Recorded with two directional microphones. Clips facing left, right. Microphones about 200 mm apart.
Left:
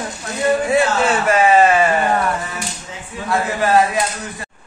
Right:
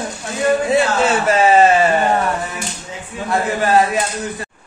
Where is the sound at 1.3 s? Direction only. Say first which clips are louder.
Right 1 dB; 30° right (ahead or behind).